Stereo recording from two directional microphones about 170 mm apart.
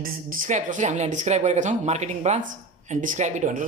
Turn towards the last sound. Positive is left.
turn(degrees=-45)  # may be behind; listen again after turning